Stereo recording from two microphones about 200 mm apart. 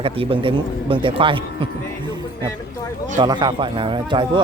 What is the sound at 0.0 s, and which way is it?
Speech, 25° right (ahead or behind).